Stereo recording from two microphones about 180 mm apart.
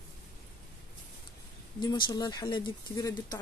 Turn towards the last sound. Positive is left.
turn(degrees=25)  # may be behind; listen again after turning